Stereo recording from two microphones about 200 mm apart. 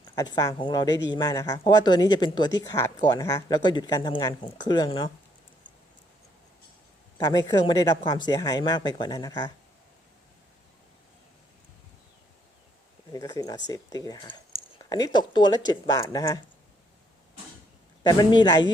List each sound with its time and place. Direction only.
0.2 s speech: 15° left (ahead or behind)
7.2 s speech: 20° left (ahead or behind)
13.1 s speech: 15° left (ahead or behind)
18.1 s speech: 20° left (ahead or behind)